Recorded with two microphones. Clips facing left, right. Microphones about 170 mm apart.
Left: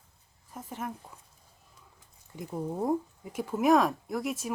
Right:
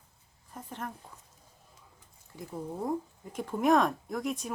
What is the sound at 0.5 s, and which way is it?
Speech, 5° left (ahead or behind).